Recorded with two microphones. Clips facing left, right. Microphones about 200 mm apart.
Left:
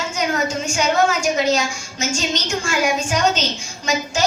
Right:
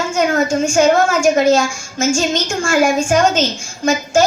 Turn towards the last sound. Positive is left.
turn(degrees=-50)  # may be behind; listen again after turning